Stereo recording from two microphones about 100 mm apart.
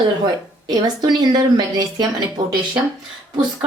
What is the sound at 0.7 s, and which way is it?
Speech, 45° right (ahead or behind).